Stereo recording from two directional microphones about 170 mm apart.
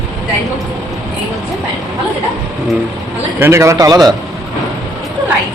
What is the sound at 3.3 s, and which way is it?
Speech, 15° right (ahead or behind).